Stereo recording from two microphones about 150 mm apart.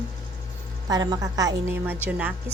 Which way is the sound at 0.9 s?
25° right (ahead or behind).